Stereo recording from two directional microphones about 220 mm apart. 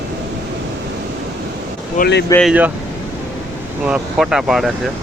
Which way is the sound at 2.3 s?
Centre (ahead or behind).